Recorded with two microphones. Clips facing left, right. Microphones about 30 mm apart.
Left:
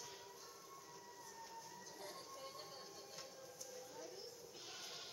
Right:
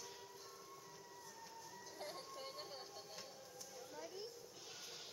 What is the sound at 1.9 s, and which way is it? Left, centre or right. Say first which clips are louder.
Music: right 4 dB; right.